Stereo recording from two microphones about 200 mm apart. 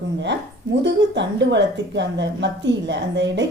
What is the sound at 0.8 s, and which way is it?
A woman's voice, 60° right (ahead or behind).